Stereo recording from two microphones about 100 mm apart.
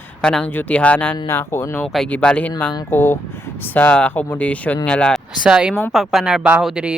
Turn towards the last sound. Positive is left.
turn(degrees=-10)  # may be behind; listen again after turning